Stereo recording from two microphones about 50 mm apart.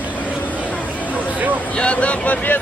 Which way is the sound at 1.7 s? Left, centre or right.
Left.